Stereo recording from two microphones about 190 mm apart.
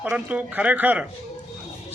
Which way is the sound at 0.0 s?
5° right (ahead or behind).